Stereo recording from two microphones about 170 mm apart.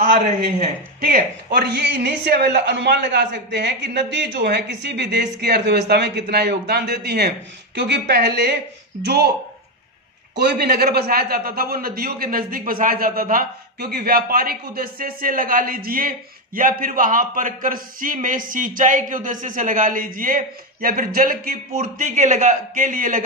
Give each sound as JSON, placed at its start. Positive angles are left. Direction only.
{"t": 1.0, "sound": "a woman's voice", "side_deg": -60}
{"t": 10.3, "sound": "a man's voice", "side_deg": -75}